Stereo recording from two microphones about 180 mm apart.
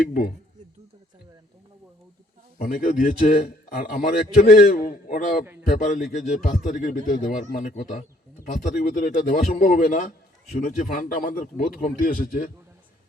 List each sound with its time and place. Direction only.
2.6 s a man's voice: 50° left (ahead or behind)